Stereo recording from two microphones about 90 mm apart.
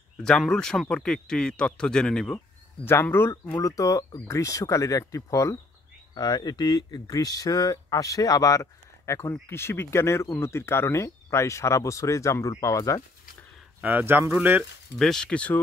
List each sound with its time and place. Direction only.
0.2 s a man's voice: 5° left (ahead or behind)
2.8 s a man's voice: 25° left (ahead or behind)
3.6 s speech: 40° left (ahead or behind)
6.1 s speech: 50° left (ahead or behind)
13.7 s speech: 20° right (ahead or behind)
15.0 s a man's voice: 5° left (ahead or behind)